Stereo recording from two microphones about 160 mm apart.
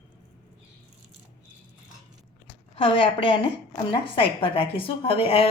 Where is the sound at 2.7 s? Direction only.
35° left (ahead or behind).